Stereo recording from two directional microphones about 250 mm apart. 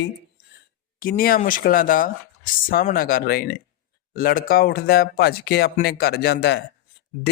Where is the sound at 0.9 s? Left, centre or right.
Left.